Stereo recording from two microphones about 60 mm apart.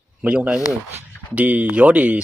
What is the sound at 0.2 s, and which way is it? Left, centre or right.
Speech, centre.